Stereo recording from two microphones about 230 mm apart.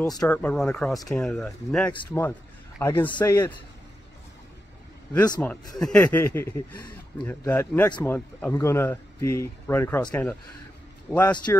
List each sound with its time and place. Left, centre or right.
0.2 s a man's voice: centre
5.1 s a man's voice: centre
5.8 s a man's voice: centre